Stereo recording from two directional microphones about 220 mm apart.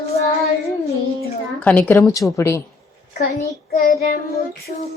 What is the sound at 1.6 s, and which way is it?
A woman's voice, 5° left (ahead or behind).